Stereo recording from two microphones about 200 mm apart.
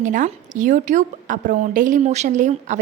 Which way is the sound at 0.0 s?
40° right (ahead or behind).